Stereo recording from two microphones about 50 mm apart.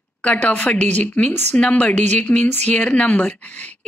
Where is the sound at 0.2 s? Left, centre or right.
Left.